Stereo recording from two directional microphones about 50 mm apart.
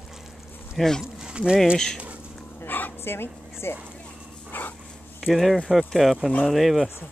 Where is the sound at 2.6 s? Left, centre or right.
Left.